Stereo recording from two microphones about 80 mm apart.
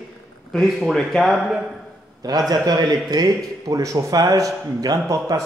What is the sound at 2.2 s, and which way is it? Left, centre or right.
A man's voice, right.